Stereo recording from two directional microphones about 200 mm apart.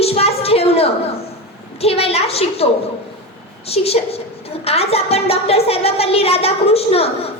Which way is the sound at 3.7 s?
30° left (ahead or behind).